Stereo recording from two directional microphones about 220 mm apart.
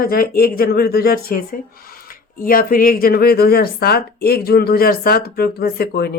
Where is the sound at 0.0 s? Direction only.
40° left (ahead or behind).